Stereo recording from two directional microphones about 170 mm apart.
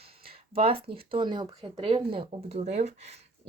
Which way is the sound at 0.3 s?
35° right (ahead or behind).